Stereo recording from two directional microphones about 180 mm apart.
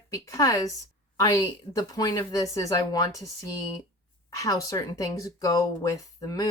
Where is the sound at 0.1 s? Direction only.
20° left (ahead or behind).